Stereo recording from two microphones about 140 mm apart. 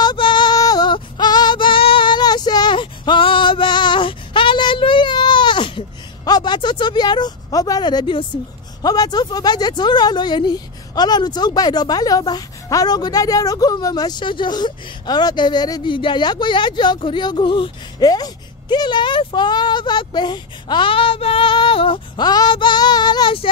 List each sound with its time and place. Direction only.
0.0 s female singing: 35° left (ahead or behind)
8.8 s speech: 30° left (ahead or behind)